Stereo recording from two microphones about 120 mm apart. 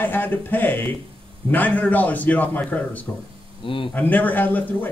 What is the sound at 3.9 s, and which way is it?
Speech, 15° left (ahead or behind).